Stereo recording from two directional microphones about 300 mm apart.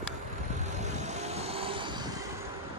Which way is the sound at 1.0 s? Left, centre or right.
Right.